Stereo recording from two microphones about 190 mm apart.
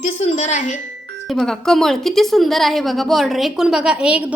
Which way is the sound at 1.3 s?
Centre (ahead or behind).